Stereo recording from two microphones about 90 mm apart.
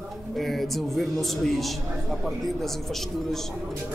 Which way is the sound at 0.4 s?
Centre (ahead or behind).